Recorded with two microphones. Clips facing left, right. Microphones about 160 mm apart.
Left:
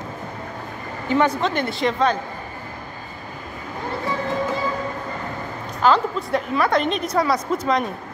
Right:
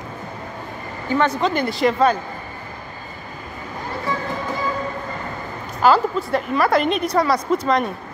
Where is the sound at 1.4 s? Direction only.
Centre (ahead or behind).